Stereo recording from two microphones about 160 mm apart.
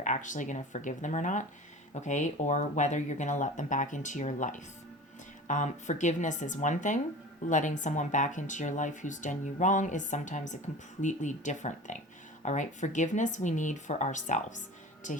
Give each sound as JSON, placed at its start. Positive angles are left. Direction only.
{"t": 0.0, "sound": "speech", "side_deg": 50}